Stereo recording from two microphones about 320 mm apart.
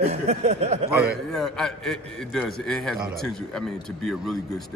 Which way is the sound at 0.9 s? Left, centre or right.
Centre.